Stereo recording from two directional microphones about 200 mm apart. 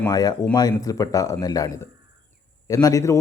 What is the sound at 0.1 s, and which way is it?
A man's voice, 20° left (ahead or behind).